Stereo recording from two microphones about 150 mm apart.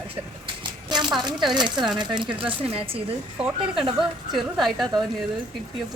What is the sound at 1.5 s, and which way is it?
Speech, 30° right (ahead or behind).